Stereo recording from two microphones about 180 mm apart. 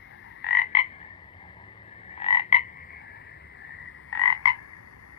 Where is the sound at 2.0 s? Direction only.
30° left (ahead or behind).